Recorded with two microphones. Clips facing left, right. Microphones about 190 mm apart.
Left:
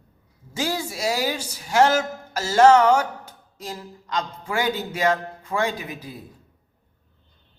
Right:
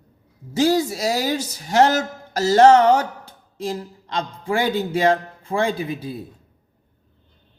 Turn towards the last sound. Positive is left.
turn(degrees=-25)  # may be behind; listen again after turning